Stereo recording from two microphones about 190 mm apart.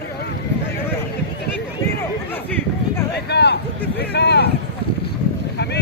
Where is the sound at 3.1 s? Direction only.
60° left (ahead or behind).